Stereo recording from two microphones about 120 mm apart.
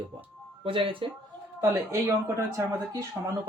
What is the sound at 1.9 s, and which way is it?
Speech, 25° right (ahead or behind).